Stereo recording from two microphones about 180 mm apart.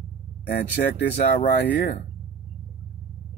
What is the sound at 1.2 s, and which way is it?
Speech, 55° left (ahead or behind).